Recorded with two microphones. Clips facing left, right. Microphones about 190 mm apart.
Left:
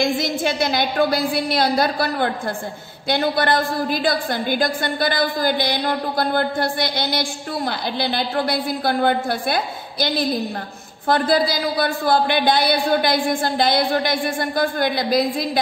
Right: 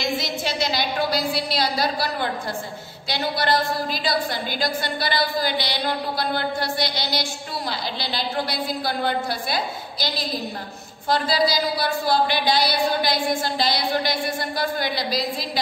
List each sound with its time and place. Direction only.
0.0 s a woman's voice: 50° left (ahead or behind)